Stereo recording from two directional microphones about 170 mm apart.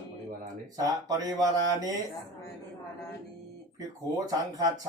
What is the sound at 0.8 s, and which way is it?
Speech, 20° right (ahead or behind).